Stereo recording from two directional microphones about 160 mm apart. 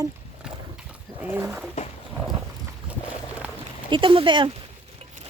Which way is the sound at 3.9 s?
30° right (ahead or behind).